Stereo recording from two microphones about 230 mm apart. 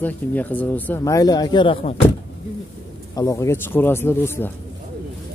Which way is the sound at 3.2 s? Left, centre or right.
Centre.